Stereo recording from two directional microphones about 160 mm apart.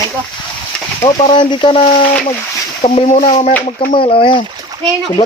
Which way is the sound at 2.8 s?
40° left (ahead or behind).